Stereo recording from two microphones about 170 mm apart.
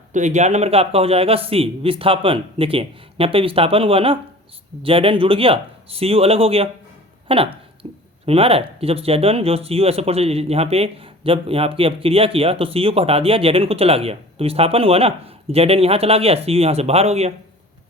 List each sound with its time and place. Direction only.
0.1 s speech: 45° right (ahead or behind)
7.3 s a sound: 30° right (ahead or behind)
8.3 s speech: 35° right (ahead or behind)